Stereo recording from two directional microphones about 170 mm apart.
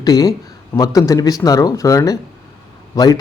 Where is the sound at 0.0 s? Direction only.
20° left (ahead or behind).